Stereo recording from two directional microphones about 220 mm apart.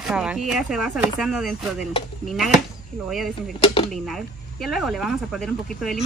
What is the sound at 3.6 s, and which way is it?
Speech, 25° left (ahead or behind).